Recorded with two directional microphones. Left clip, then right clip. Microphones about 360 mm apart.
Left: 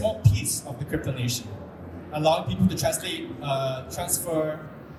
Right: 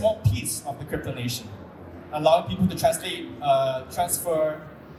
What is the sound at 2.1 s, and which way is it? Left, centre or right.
A man's voice, centre.